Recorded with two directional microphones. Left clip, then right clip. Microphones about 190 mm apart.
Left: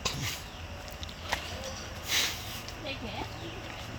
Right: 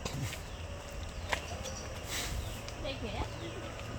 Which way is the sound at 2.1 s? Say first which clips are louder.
Left 11 dB; 5° right (ahead or behind).